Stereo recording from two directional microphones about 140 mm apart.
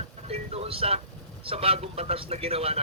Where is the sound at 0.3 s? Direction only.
45° right (ahead or behind).